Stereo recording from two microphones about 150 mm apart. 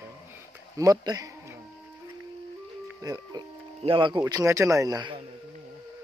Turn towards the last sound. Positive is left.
turn(degrees=-25)  # may be behind; listen again after turning